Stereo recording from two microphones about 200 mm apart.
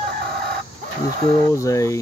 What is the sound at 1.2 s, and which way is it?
Speech, 20° left (ahead or behind).